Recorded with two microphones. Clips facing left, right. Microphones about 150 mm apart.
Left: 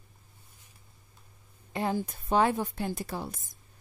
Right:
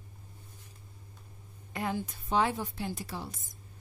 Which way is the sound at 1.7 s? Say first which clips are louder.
Left 4 dB; 30° left (ahead or behind).